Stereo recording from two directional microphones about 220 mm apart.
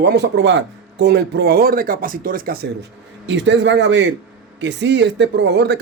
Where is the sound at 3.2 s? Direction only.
55° right (ahead or behind).